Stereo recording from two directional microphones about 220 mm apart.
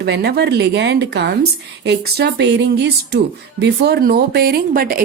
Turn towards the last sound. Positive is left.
turn(degrees=-40)  # may be behind; listen again after turning